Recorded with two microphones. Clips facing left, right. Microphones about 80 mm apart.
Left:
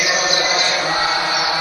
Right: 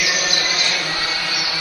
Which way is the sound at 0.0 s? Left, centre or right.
Left.